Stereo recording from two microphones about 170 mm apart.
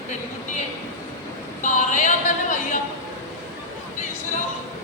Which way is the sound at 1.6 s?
45° left (ahead or behind).